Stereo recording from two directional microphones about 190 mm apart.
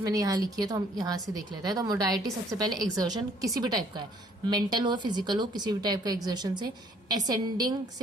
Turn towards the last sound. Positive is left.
turn(degrees=-20)  # may be behind; listen again after turning